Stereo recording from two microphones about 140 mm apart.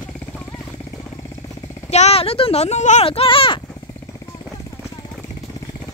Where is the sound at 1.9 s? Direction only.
50° left (ahead or behind).